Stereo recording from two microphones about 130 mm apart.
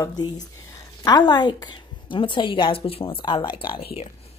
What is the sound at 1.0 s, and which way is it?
Speech, 30° left (ahead or behind).